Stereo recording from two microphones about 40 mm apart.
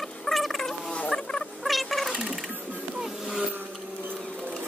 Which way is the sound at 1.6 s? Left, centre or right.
Centre.